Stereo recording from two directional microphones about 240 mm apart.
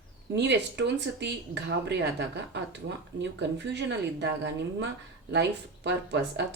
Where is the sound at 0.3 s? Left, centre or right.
Right.